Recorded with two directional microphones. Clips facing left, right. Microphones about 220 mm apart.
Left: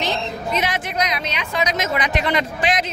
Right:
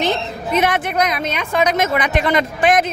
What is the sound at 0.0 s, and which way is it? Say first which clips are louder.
A woman's voice: right 4 dB; 55° right (ahead or behind).